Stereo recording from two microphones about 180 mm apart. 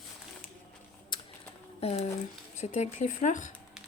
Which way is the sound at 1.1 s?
30° left (ahead or behind).